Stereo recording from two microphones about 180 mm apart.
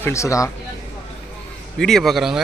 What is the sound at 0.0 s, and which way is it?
Speech, 15° left (ahead or behind).